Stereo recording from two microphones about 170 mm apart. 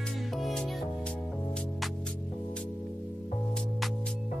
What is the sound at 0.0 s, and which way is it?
Music, centre (ahead or behind).